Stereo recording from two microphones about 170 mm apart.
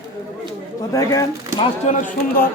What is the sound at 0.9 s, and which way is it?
Speech, 20° left (ahead or behind).